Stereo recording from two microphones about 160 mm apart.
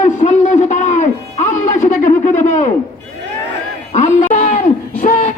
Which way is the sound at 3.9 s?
50° left (ahead or behind).